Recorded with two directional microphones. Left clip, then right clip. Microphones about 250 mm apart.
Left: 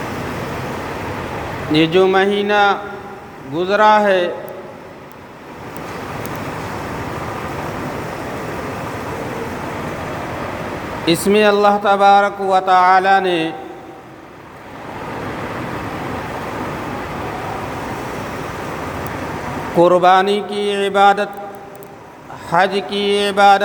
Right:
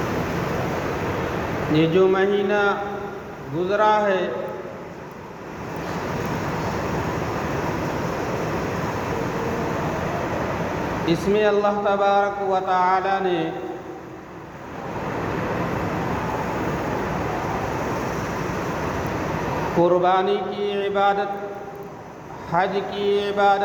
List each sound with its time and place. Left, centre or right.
1.7 s speech: left
11.0 s speech: left
19.8 s speech: left
22.4 s speech: left